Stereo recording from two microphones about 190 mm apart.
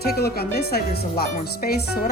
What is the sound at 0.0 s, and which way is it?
Speech, 55° left (ahead or behind).